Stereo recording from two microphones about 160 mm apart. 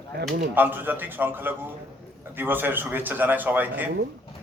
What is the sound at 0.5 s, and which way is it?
A man's voice, 10° right (ahead or behind).